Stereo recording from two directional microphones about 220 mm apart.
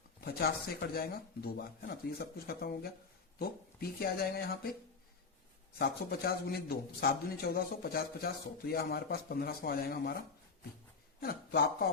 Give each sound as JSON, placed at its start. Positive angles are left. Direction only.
{"t": 0.2, "sound": "a man's voice", "side_deg": 45}
{"t": 5.8, "sound": "a man's voice", "side_deg": 45}
{"t": 11.2, "sound": "a man's voice", "side_deg": 45}